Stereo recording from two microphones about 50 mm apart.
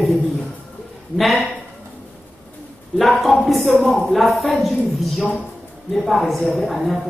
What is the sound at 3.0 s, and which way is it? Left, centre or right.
A man's voice, centre.